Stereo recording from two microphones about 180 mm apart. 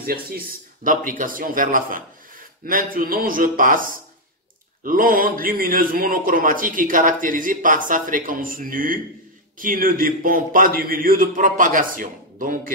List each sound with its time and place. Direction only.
0.0 s a man's voice: 55° right (ahead or behind)